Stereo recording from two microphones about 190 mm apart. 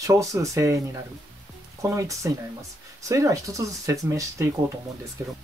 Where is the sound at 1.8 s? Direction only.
15° right (ahead or behind).